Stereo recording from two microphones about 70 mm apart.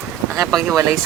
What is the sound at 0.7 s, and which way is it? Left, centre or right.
Speech, right.